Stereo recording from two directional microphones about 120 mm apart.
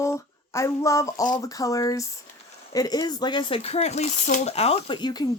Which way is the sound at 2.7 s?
35° left (ahead or behind).